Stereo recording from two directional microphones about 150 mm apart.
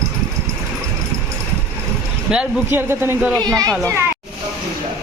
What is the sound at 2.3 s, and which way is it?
A man's voice, 5° right (ahead or behind).